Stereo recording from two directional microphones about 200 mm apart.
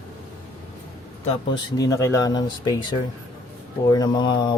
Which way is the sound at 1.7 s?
20° left (ahead or behind).